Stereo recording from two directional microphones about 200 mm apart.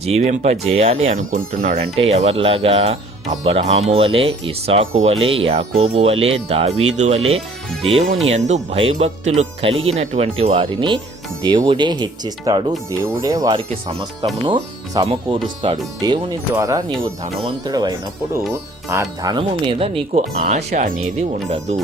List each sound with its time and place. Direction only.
0.0 s speech: 35° right (ahead or behind)